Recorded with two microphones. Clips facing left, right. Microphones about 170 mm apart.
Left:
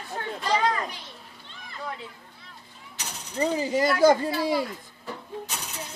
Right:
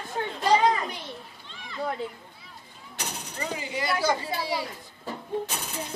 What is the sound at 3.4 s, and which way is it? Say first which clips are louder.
Speech: left 9 dB; 40° left (ahead or behind).